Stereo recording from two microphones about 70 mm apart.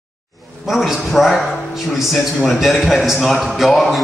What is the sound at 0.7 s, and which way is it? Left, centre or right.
A man's voice, centre.